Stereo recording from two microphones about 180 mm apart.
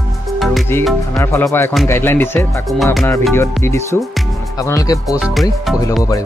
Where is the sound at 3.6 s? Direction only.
15° left (ahead or behind).